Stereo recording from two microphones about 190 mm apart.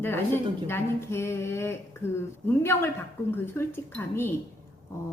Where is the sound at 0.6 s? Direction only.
10° left (ahead or behind).